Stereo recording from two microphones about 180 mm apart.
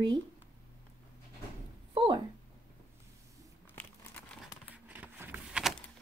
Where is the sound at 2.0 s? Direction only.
25° right (ahead or behind).